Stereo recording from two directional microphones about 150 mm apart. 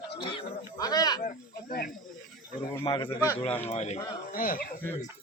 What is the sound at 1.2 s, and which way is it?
Speech, 70° left (ahead or behind).